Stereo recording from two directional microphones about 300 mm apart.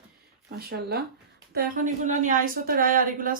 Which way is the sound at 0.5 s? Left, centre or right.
Right.